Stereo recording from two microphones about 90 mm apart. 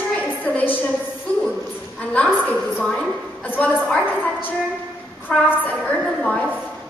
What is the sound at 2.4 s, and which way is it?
A woman's voice, 15° left (ahead or behind).